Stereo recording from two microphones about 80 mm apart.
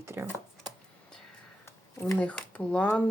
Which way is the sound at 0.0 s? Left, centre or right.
Right.